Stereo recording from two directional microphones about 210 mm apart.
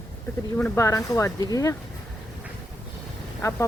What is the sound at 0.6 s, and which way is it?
Speech, 10° left (ahead or behind).